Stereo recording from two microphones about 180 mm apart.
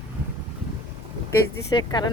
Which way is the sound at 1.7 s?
25° left (ahead or behind).